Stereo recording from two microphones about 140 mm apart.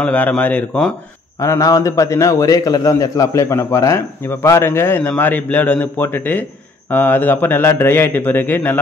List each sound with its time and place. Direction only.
0.0 s a man's voice: 10° left (ahead or behind)
1.4 s a man's voice: 25° left (ahead or behind)